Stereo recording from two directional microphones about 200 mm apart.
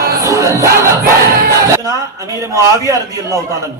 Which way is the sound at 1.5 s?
15° right (ahead or behind).